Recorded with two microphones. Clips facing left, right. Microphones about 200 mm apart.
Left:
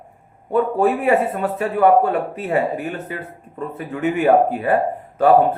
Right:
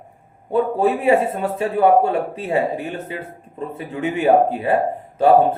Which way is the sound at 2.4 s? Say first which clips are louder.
Left 1 dB; 25° right (ahead or behind).